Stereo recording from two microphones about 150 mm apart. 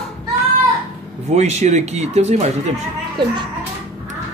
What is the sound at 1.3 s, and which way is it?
A man's voice, 50° right (ahead or behind).